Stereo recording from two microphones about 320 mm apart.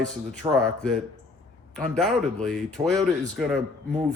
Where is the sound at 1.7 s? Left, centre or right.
Centre.